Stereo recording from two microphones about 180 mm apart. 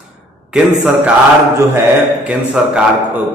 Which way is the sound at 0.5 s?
5° right (ahead or behind).